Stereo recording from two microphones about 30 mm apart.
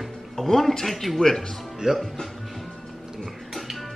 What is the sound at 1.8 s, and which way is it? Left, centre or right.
Speech, right.